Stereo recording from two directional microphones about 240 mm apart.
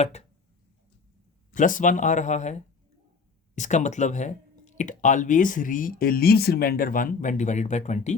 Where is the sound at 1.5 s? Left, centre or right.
Left.